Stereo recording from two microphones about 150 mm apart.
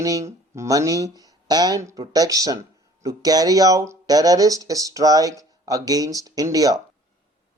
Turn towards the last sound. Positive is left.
turn(degrees=-25)  # may be behind; listen again after turning